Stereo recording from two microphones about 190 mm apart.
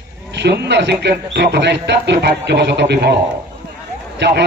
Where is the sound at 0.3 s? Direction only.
65° right (ahead or behind).